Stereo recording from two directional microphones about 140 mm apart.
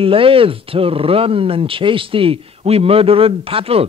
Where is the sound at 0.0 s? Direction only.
40° right (ahead or behind).